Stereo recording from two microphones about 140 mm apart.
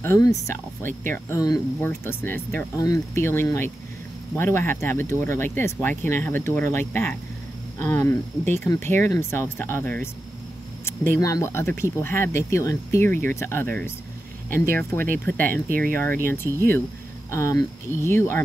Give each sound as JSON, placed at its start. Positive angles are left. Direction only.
{"t": 0.0, "sound": "speech", "side_deg": 20}
{"t": 16.5, "sound": "speech", "side_deg": -25}
{"t": 17.3, "sound": "speech", "side_deg": 20}